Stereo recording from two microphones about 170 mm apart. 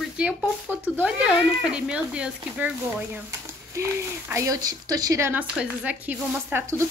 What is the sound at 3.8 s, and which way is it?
Speech, 15° right (ahead or behind).